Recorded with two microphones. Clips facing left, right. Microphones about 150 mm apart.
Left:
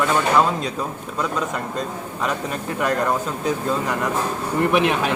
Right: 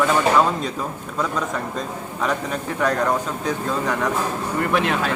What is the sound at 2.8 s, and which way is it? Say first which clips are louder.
Speech: even; 5° left (ahead or behind).